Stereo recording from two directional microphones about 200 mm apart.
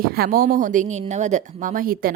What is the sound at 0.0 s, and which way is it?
A woman's voice, 50° right (ahead or behind).